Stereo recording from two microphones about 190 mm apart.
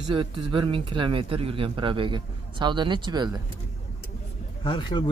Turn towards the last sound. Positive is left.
turn(degrees=25)  # may be behind; listen again after turning